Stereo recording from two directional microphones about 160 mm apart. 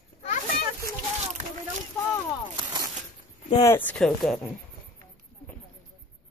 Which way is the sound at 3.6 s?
10° left (ahead or behind).